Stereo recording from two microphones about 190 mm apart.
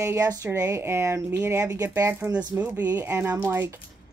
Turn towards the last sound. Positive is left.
turn(degrees=-10)  # may be behind; listen again after turning